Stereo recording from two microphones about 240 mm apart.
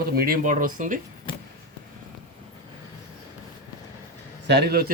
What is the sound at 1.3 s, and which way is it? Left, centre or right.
Vehicle, left.